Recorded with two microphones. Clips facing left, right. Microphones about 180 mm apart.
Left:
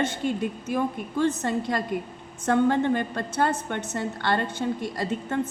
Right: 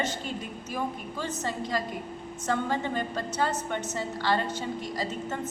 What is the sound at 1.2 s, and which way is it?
A woman's voice, 60° left (ahead or behind).